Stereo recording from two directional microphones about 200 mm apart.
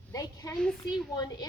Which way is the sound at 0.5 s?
5° left (ahead or behind).